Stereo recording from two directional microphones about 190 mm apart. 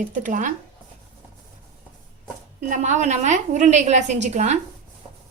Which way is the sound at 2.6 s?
40° right (ahead or behind).